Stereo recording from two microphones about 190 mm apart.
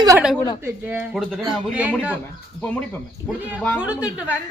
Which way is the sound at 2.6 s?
10° left (ahead or behind).